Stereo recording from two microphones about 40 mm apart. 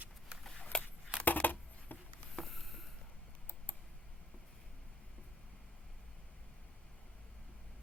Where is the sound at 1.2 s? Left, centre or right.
Left.